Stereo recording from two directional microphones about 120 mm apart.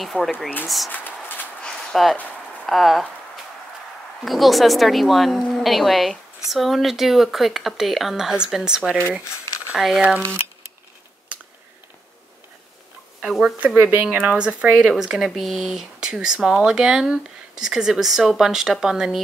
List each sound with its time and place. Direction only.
0.0 s speech: centre (ahead or behind)
0.9 s a sound: 15° left (ahead or behind)
2.6 s speech: centre (ahead or behind)
4.2 s speech: centre (ahead or behind)
9.2 s squish: 25° left (ahead or behind)
9.8 s speech: 5° right (ahead or behind)
13.2 s speech: 5° right (ahead or behind)